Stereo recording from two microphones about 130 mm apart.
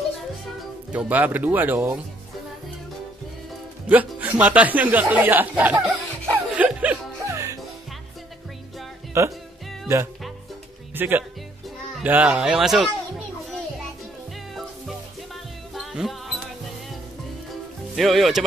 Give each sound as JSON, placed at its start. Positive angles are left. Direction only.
{"t": 0.9, "sound": "speech", "side_deg": -10}
{"t": 3.8, "sound": "music", "side_deg": -10}
{"t": 4.4, "sound": "chuckle", "side_deg": -10}
{"t": 7.2, "sound": "music", "side_deg": -25}
{"t": 9.1, "sound": "speech", "side_deg": -20}
{"t": 11.0, "sound": "speech", "side_deg": -15}
{"t": 14.5, "sound": "music", "side_deg": 0}
{"t": 17.9, "sound": "speech", "side_deg": 0}